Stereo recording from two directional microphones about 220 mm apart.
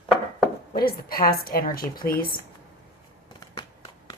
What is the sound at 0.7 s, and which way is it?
A woman's voice, 45° left (ahead or behind).